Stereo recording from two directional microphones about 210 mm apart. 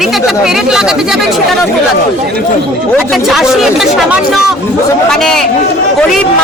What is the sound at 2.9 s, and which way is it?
Speech, centre (ahead or behind).